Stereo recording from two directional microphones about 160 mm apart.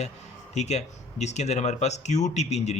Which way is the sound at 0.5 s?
45° left (ahead or behind).